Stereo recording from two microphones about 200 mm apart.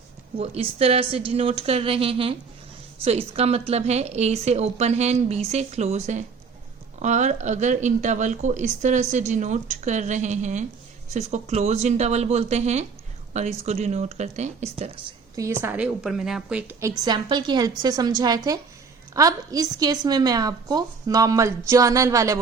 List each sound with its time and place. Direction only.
0.3 s speech: 30° right (ahead or behind)
15.4 s a woman's voice: 15° right (ahead or behind)
17.0 s a woman's voice: 20° right (ahead or behind)